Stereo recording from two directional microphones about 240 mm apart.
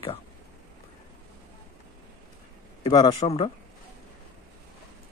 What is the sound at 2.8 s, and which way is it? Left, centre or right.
Speech, left.